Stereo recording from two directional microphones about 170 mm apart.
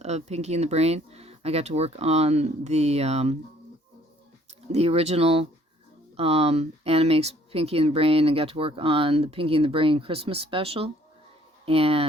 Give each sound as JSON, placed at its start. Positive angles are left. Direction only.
{"t": 0.0, "sound": "speech", "side_deg": -40}
{"t": 4.7, "sound": "speech", "side_deg": -35}